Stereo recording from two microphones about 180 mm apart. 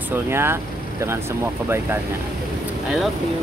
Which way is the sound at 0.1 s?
15° right (ahead or behind).